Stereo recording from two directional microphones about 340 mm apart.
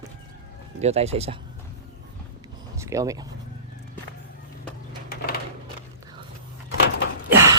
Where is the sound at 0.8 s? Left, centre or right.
Centre.